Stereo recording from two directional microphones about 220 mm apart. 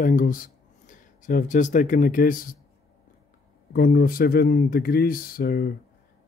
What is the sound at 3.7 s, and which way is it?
Speech, 45° left (ahead or behind).